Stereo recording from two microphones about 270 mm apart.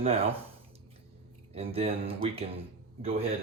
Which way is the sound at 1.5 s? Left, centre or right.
Right.